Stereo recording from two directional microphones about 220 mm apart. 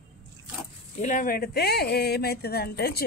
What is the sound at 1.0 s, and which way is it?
Speech, 40° left (ahead or behind).